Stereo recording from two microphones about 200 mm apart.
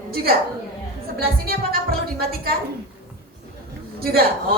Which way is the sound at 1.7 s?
50° right (ahead or behind).